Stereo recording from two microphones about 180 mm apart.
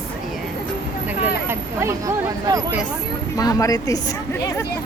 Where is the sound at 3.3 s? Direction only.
20° left (ahead or behind).